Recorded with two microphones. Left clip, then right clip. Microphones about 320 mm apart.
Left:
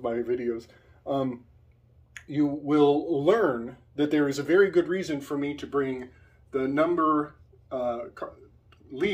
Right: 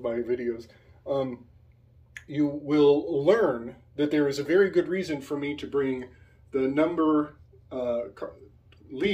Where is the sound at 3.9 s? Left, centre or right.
Left.